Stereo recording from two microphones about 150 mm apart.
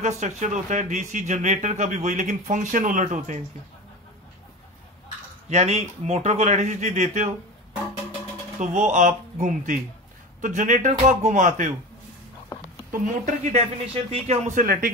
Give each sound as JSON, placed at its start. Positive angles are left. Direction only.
{"t": 0.0, "sound": "speech", "side_deg": -55}
{"t": 5.5, "sound": "speech", "side_deg": -45}
{"t": 8.5, "sound": "speech", "side_deg": -55}
{"t": 12.9, "sound": "speech", "side_deg": -55}